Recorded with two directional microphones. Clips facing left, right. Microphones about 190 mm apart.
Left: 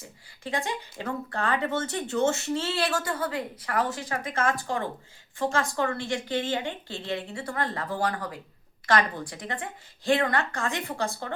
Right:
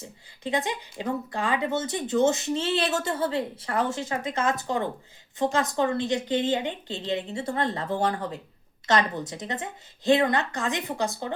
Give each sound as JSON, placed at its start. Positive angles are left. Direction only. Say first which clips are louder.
{"t": 0.0, "sound": "a woman's voice", "louder": "right 4 dB", "side_deg": -20}